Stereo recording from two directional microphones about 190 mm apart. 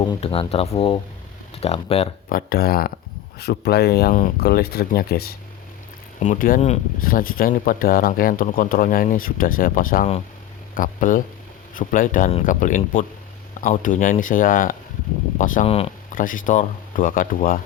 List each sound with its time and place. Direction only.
0.0 s speech: 25° left (ahead or behind)
2.3 s speech: 50° left (ahead or behind)
6.2 s speech: 45° left (ahead or behind)